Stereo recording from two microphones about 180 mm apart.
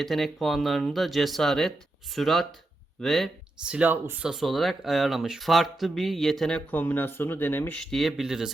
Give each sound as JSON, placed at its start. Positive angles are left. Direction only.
{"t": 0.0, "sound": "speech", "side_deg": 0}